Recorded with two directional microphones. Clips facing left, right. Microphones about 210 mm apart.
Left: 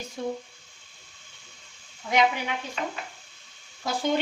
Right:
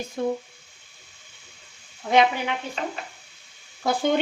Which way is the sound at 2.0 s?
65° right (ahead or behind).